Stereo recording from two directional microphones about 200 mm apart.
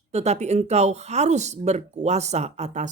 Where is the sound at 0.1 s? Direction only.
35° right (ahead or behind).